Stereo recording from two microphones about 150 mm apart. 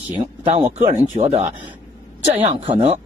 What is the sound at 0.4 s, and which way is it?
Speech, 40° right (ahead or behind).